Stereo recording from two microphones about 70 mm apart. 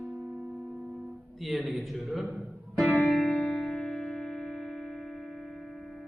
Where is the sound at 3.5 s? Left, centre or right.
Centre.